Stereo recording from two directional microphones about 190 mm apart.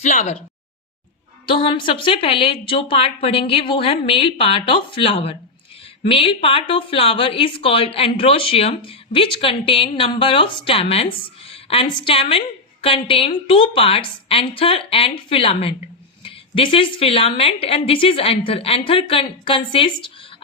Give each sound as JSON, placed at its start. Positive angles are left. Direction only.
{"t": 0.0, "sound": "speech", "side_deg": 35}
{"t": 1.5, "sound": "a woman's voice", "side_deg": 25}